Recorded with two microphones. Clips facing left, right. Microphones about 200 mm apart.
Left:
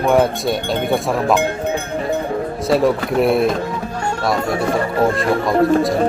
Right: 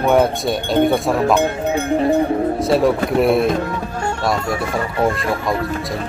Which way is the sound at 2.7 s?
Centre (ahead or behind).